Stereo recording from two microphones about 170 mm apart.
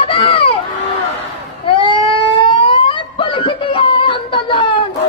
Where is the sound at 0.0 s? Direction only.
35° left (ahead or behind).